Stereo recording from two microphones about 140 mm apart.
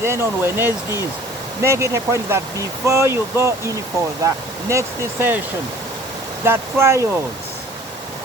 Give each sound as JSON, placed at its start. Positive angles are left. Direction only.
{"t": 0.0, "sound": "speech", "side_deg": -20}
{"t": 6.4, "sound": "speech", "side_deg": -20}